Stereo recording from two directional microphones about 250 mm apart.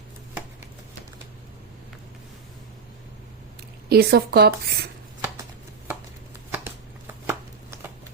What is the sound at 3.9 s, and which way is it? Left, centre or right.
Speech, right.